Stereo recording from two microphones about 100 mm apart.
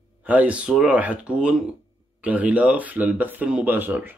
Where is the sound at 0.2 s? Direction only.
15° right (ahead or behind).